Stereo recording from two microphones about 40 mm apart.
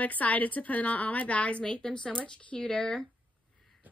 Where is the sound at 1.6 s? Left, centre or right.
Centre.